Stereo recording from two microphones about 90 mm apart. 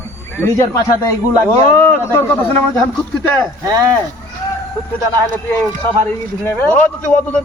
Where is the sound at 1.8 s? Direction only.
20° left (ahead or behind).